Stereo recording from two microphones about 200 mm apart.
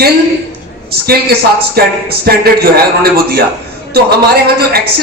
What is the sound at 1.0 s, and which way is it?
Speech, 50° right (ahead or behind).